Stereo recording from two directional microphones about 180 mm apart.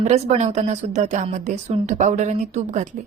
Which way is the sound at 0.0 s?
40° right (ahead or behind).